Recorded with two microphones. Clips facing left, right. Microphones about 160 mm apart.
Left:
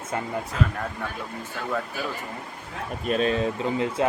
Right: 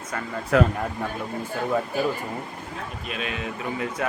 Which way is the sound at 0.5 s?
70° right (ahead or behind).